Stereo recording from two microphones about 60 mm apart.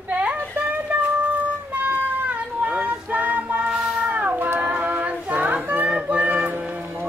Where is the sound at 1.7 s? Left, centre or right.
Right.